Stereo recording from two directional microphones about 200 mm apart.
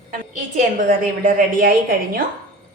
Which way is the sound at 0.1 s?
45° right (ahead or behind).